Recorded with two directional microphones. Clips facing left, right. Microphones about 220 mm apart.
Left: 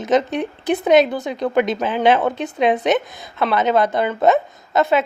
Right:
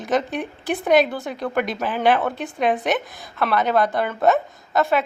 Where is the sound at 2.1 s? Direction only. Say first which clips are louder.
Left 2 dB; 20° left (ahead or behind).